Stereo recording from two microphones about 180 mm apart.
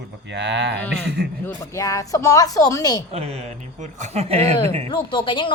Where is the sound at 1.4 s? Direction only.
15° left (ahead or behind).